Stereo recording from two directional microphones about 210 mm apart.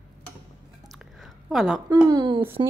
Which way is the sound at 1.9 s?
15° right (ahead or behind).